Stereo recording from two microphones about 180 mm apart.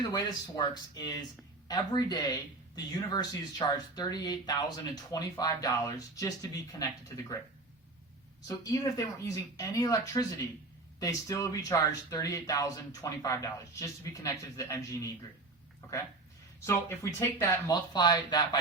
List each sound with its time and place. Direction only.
0.1 s speech: 20° left (ahead or behind)
8.4 s speech: 20° left (ahead or behind)
16.6 s speech: 15° left (ahead or behind)